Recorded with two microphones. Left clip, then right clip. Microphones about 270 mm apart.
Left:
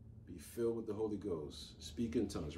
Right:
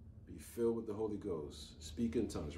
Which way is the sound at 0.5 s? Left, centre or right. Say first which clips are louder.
Right 1 dB; centre.